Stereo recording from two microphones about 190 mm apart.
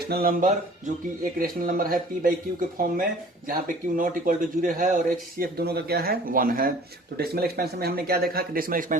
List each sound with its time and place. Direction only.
0.1 s speech: 50° right (ahead or behind)